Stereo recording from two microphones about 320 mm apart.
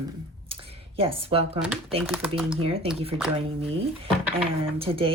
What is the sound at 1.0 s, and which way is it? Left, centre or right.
Speech, centre.